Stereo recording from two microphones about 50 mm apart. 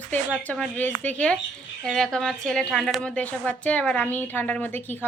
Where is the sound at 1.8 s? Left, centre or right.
Centre.